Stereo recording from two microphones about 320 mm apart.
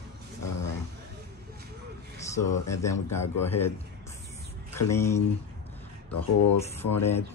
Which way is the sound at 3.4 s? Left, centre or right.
Centre.